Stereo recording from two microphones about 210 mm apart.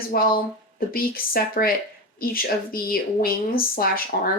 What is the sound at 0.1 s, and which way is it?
Speech, 45° left (ahead or behind).